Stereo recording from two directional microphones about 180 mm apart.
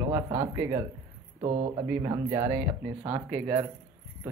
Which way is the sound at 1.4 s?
40° right (ahead or behind).